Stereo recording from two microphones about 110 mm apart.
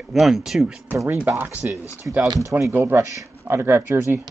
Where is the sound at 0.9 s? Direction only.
20° right (ahead or behind).